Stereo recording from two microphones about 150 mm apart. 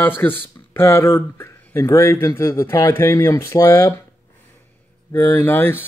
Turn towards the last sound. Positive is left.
turn(degrees=15)  # may be behind; listen again after turning